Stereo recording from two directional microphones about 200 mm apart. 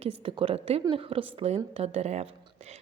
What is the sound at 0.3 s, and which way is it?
Speech, 25° right (ahead or behind).